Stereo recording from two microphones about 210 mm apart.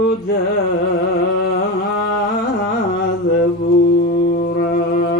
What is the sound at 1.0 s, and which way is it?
Music, 45° left (ahead or behind).